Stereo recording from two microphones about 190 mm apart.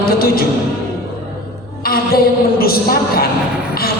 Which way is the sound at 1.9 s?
50° left (ahead or behind).